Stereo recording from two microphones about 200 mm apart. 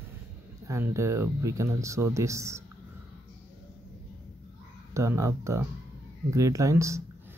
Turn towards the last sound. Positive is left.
turn(degrees=-15)  # may be behind; listen again after turning